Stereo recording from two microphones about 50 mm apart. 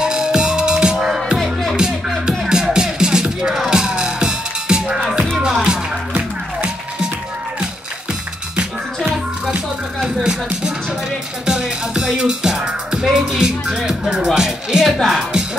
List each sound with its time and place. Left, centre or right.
0.0 s music: centre
1.4 s music: centre
10.0 s music: centre
14.1 s speech: centre